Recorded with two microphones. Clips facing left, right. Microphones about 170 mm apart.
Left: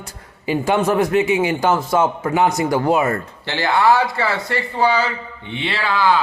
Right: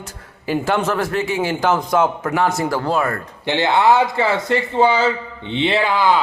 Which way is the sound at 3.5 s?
20° right (ahead or behind).